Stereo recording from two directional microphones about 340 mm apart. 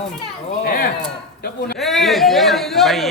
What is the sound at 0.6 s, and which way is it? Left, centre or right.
Speech, left.